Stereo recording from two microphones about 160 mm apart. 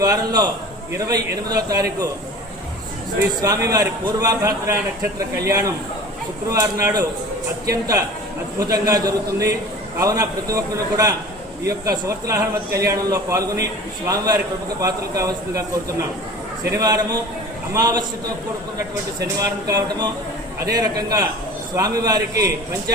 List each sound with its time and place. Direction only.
0.0 s a man's voice: 25° right (ahead or behind)
3.4 s a man's voice: 20° right (ahead or behind)
8.5 s a man's voice: 25° right (ahead or behind)
19.4 s a man's voice: 25° right (ahead or behind)